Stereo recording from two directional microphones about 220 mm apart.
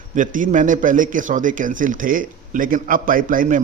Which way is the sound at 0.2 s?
35° right (ahead or behind).